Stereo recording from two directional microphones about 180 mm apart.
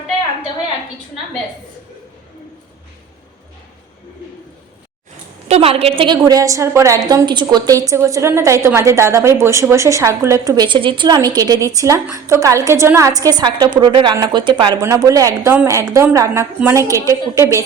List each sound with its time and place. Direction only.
5.5 s a woman's voice: 35° right (ahead or behind)
6.2 s a woman's voice: 20° right (ahead or behind)